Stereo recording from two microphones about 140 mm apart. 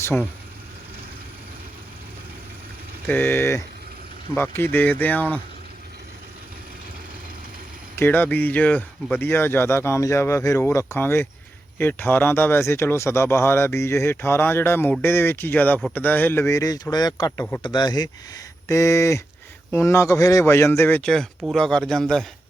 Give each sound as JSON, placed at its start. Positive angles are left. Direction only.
{"t": 0.0, "sound": "speech", "side_deg": 15}
{"t": 3.1, "sound": "speech", "side_deg": 15}
{"t": 7.9, "sound": "speech", "side_deg": 15}